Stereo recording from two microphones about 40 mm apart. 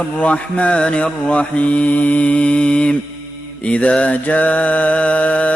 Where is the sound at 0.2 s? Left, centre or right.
Left.